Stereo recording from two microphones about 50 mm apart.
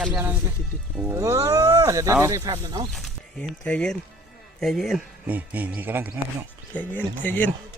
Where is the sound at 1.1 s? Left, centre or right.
Right.